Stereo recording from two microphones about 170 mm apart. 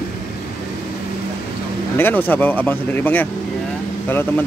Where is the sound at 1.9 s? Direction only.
10° left (ahead or behind).